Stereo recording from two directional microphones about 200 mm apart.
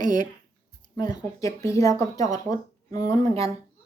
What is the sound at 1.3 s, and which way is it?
Speech, 15° left (ahead or behind).